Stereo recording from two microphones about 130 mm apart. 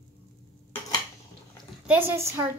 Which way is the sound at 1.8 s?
15° right (ahead or behind).